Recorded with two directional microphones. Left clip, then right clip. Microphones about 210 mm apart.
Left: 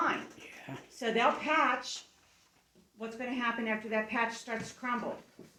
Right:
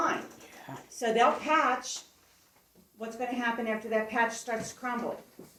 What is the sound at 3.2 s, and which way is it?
A woman's voice, 10° left (ahead or behind).